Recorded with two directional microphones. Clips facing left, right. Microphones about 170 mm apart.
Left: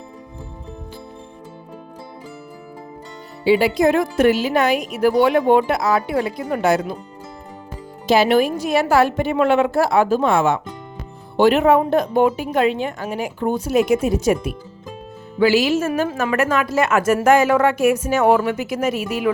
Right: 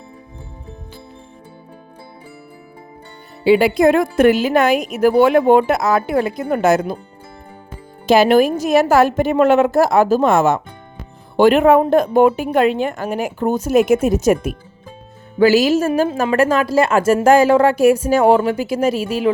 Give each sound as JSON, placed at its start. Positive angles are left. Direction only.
{"t": 3.4, "sound": "a woman's voice", "side_deg": -55}
{"t": 8.0, "sound": "a woman's voice", "side_deg": -50}
{"t": 15.9, "sound": "a woman's voice", "side_deg": -30}